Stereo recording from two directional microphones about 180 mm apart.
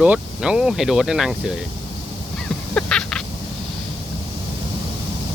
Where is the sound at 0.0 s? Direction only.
5° right (ahead or behind).